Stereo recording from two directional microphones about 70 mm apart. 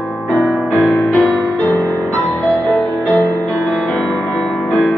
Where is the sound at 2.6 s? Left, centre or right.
Centre.